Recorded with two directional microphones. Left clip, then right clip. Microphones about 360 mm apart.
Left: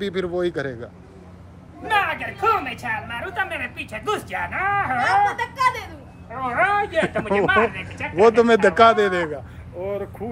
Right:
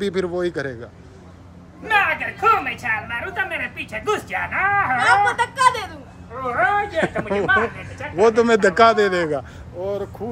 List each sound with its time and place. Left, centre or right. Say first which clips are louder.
0.0 s a woman's voice: right 1 dB; centre
1.9 s a woman's voice: right 3 dB; centre
4.9 s speech: right 2 dB; right
6.4 s speech: right 1 dB; left
8.2 s a woman's voice: left 1 dB; centre